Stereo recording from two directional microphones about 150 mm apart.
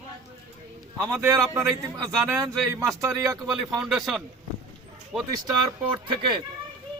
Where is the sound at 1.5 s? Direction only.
15° right (ahead or behind).